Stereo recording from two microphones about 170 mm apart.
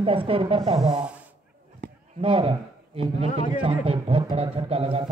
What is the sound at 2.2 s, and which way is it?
Speech, 30° right (ahead or behind).